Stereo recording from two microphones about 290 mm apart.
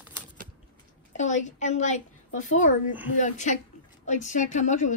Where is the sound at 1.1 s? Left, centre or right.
Left.